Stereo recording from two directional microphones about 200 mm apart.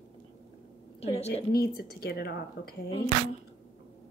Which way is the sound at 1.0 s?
30° left (ahead or behind).